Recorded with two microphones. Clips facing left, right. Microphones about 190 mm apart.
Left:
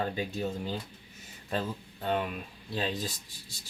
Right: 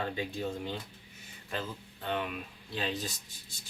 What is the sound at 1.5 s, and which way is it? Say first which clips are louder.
Speech: left 5 dB; 40° left (ahead or behind).